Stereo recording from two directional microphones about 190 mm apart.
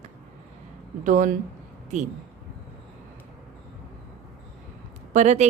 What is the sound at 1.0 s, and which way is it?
A woman's voice, 40° right (ahead or behind).